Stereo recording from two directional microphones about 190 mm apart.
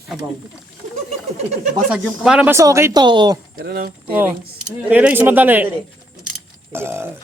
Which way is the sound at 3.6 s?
55° right (ahead or behind).